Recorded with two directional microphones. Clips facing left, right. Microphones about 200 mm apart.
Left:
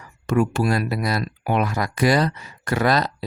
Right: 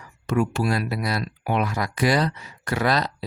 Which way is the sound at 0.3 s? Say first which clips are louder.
Left 3 dB; 50° left (ahead or behind).